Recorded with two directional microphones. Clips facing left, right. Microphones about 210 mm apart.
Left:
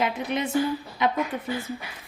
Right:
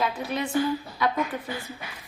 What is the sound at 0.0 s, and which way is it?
Speech, 20° left (ahead or behind).